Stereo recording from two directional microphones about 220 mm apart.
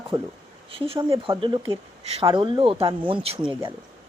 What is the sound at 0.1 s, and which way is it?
Speech, 20° right (ahead or behind).